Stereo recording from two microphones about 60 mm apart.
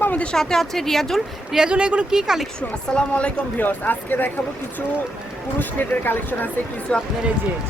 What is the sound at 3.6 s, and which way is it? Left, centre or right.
Speech, left.